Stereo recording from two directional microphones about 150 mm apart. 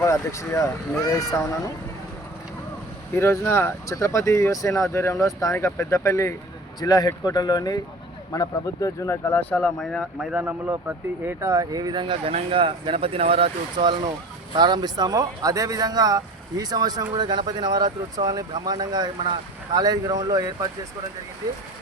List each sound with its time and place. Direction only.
0.0 s speech: 20° left (ahead or behind)
3.2 s speech: 15° left (ahead or behind); by 20.7 s 25° right (ahead or behind)